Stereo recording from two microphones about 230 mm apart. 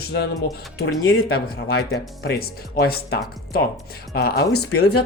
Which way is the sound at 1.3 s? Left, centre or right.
Left.